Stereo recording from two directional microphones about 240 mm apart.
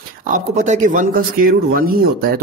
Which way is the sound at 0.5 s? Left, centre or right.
Right.